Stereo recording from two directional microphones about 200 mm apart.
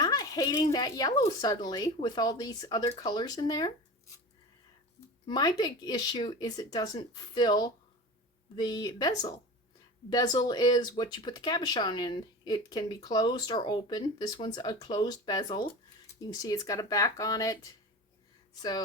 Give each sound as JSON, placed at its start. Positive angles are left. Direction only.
{"t": 0.0, "sound": "speech", "side_deg": 20}
{"t": 5.2, "sound": "speech", "side_deg": 20}